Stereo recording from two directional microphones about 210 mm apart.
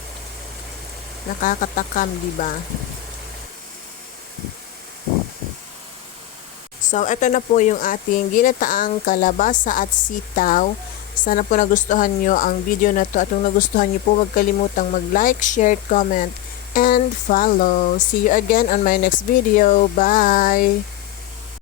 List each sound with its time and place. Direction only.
1.4 s speech: 40° left (ahead or behind)
6.8 s speech: 35° left (ahead or behind)